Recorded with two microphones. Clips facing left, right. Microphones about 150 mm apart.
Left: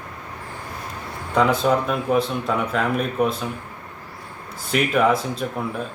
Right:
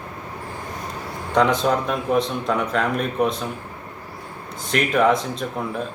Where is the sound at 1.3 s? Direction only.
5° left (ahead or behind).